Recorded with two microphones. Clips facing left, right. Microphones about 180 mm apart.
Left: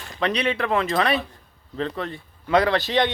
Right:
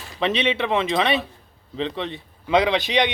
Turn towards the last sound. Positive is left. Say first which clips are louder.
# even
turn(degrees=-20)  # may be behind; listen again after turning